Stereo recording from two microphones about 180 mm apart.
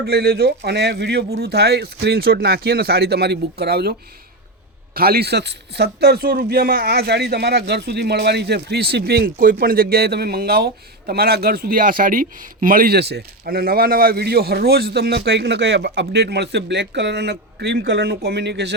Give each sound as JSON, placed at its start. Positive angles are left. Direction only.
{"t": 0.0, "sound": "a man's voice", "side_deg": -65}
{"t": 4.9, "sound": "a man's voice", "side_deg": -60}